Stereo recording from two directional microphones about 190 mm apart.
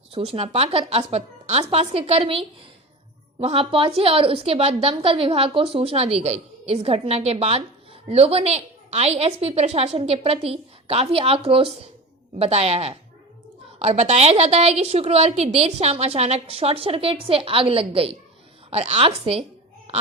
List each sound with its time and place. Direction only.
0.1 s a woman's voice: 30° right (ahead or behind)